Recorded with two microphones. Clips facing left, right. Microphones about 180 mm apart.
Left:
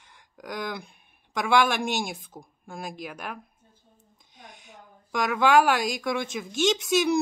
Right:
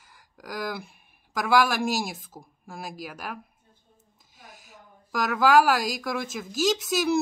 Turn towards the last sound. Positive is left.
turn(degrees=0)  # may be behind; listen again after turning